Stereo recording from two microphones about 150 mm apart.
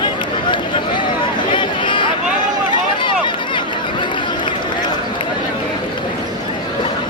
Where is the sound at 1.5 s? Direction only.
30° left (ahead or behind).